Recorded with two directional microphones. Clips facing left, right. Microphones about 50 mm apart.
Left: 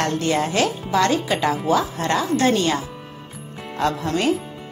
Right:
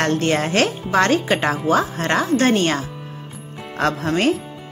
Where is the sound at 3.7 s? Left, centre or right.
Right.